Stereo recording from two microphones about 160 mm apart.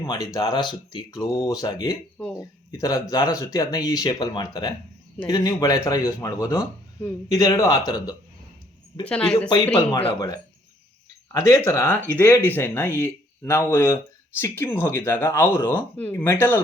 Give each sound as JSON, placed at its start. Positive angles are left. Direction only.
{"t": 0.3, "sound": "speech", "side_deg": 30}
{"t": 9.0, "sound": "speech", "side_deg": 5}
{"t": 9.7, "sound": "speech", "side_deg": 35}
{"t": 11.3, "sound": "speech", "side_deg": 20}